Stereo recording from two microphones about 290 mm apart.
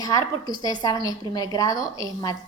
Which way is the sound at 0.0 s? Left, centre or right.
Centre.